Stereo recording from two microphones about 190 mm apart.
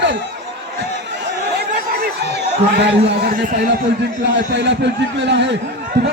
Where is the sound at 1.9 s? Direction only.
60° right (ahead or behind).